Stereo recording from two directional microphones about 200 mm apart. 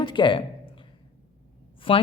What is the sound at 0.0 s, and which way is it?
Speech, 25° left (ahead or behind).